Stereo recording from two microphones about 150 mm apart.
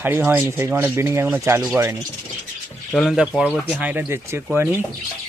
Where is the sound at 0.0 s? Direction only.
10° right (ahead or behind).